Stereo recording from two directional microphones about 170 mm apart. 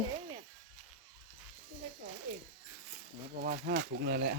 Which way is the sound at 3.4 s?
55° right (ahead or behind).